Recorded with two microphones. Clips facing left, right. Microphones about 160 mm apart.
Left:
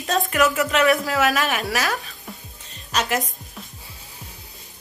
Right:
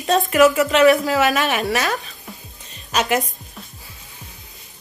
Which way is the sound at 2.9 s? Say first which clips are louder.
Right 4 dB; 5° right (ahead or behind).